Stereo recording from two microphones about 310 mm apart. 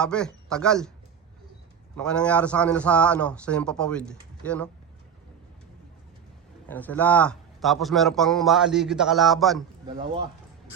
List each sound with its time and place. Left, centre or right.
0.0 s a man's voice: centre
2.0 s a man's voice: centre
6.7 s a man's voice: centre
9.8 s speech: centre